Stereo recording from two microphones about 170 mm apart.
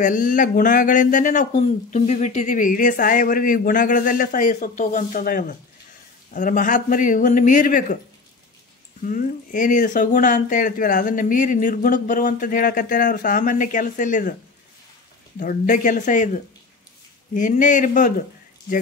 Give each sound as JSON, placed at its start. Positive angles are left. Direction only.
{"t": 0.0, "sound": "speech", "side_deg": 50}
{"t": 9.0, "sound": "speech", "side_deg": 50}
{"t": 15.3, "sound": "speech", "side_deg": 55}